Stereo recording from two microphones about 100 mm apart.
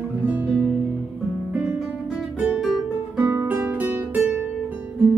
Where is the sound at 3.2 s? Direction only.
30° right (ahead or behind).